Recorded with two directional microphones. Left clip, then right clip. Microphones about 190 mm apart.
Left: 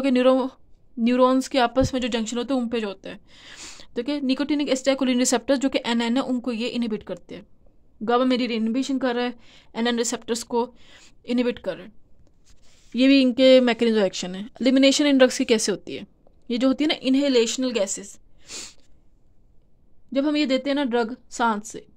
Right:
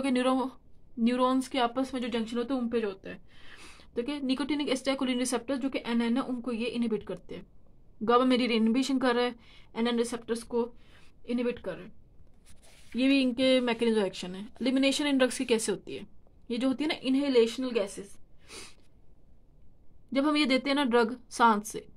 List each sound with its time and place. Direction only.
0.0 s speech: 25° left (ahead or behind)
8.0 s speech: 20° left (ahead or behind); by 11.9 s 55° left (ahead or behind)
12.9 s speech: 40° left (ahead or behind)
20.1 s a woman's voice: 15° left (ahead or behind)